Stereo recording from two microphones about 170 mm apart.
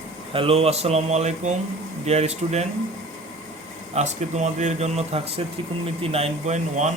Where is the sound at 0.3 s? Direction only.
35° right (ahead or behind).